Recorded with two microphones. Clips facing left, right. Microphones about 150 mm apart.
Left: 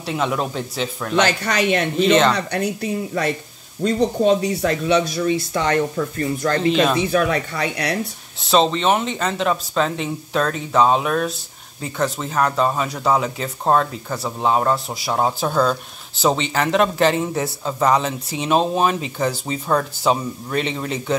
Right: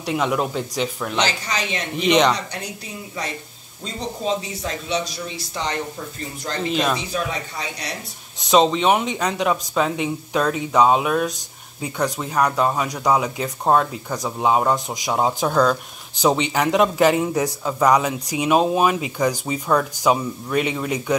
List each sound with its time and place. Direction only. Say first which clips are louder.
0.0 s speech: right 1 dB; 10° right (ahead or behind)
1.1 s speech: left 8 dB; 55° left (ahead or behind)
2.0 s speech: even; 15° right (ahead or behind)
2.3 s speech: left 8 dB; 60° left (ahead or behind)
6.7 s speech: left 2 dB; centre (ahead or behind)
7.0 s speech: left 8 dB; 60° left (ahead or behind)
8.4 s speech: right 1 dB; 15° right (ahead or behind)
15.1 s speech: even; centre (ahead or behind)
16.3 s speech: even; 15° right (ahead or behind)